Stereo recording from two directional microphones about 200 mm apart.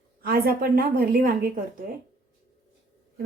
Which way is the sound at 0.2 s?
50° right (ahead or behind).